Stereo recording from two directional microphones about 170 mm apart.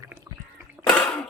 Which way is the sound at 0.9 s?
5° left (ahead or behind).